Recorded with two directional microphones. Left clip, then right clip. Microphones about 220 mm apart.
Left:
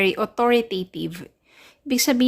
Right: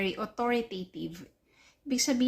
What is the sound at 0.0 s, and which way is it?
A woman's voice, 35° left (ahead or behind).